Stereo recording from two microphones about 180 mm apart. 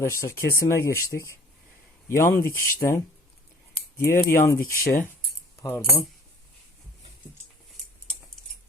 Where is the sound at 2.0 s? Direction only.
15° left (ahead or behind).